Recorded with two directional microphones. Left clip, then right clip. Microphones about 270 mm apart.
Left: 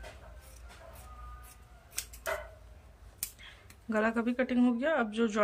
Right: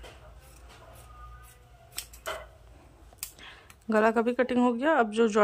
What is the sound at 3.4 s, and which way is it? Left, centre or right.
Speech, centre.